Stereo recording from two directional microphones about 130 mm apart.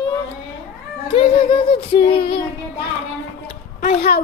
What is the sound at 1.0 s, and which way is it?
Child singing, 40° left (ahead or behind).